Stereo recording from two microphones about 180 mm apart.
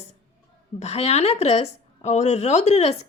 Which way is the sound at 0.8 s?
35° left (ahead or behind).